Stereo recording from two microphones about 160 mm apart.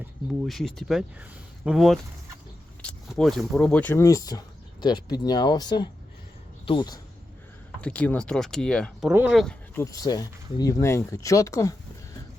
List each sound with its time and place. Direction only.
0.4 s speech: centre (ahead or behind); by 7.0 s 25° left (ahead or behind)
7.8 s speech: 10° left (ahead or behind)
9.7 s speech: 20° left (ahead or behind)